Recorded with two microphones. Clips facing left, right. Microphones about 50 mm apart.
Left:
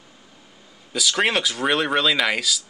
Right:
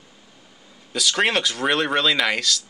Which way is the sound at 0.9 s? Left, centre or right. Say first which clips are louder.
Even; centre.